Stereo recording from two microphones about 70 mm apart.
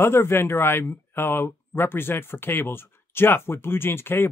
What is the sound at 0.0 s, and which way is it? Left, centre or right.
Speech, left.